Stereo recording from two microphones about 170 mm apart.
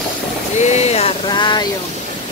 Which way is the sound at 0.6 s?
40° left (ahead or behind).